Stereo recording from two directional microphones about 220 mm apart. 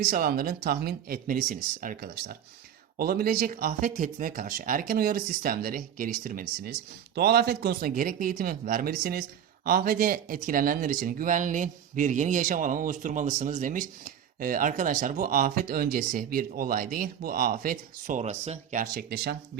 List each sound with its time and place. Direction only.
0.0 s speech: 40° right (ahead or behind)